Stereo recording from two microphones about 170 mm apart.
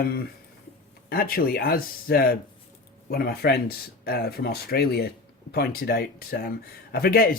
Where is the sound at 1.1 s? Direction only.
60° left (ahead or behind).